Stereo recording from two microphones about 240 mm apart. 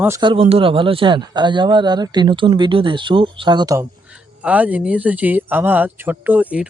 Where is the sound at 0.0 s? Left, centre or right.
Centre.